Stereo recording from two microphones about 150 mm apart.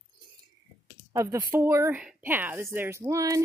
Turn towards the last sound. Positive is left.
turn(degrees=-20)  # may be behind; listen again after turning